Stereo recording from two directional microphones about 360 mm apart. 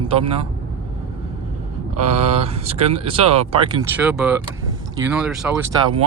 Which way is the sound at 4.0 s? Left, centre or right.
Centre.